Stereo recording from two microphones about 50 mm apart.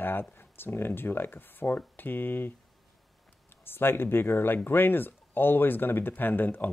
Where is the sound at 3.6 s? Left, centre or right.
Left.